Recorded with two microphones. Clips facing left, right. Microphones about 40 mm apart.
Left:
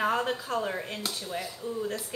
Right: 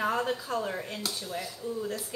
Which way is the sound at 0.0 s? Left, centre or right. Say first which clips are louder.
Left 1 dB; left.